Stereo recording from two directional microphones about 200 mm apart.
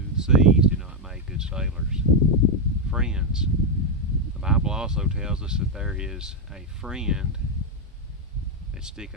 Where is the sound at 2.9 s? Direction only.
5° right (ahead or behind).